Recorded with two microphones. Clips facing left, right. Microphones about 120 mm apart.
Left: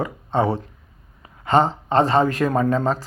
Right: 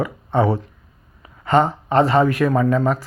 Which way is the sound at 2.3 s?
35° left (ahead or behind).